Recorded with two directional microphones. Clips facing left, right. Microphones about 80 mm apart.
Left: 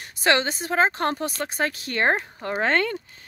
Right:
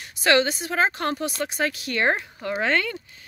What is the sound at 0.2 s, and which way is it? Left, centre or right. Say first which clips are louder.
Speech: right 2 dB; left.